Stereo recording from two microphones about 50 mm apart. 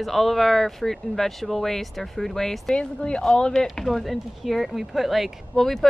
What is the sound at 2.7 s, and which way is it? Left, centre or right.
Speech, centre.